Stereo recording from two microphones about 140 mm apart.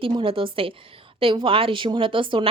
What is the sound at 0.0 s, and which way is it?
Speech, 40° right (ahead or behind).